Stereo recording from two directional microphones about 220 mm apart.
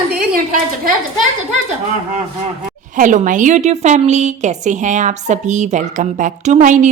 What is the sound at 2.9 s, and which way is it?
A woman's voice, 35° right (ahead or behind).